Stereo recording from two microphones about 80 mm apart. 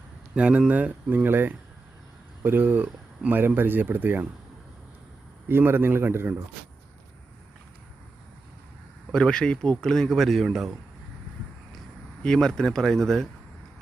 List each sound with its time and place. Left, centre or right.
0.3 s speech: centre
5.5 s speech: right
9.1 s speech: centre
12.2 s speech: centre